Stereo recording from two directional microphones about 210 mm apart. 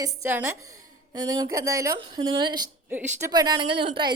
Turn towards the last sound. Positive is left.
turn(degrees=-25)  # may be behind; listen again after turning